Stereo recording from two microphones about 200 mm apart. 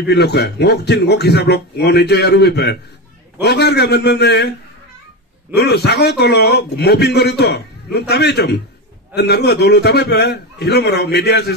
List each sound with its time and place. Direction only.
0.0 s a man's voice: 55° left (ahead or behind)
5.5 s a man's voice: 55° left (ahead or behind)